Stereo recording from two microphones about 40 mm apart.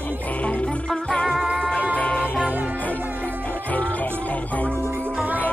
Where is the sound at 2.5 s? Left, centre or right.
Right.